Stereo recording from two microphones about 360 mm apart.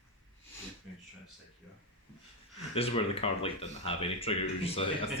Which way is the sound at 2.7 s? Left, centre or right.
Centre.